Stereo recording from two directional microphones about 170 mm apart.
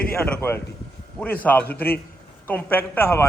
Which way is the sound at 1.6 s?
65° left (ahead or behind).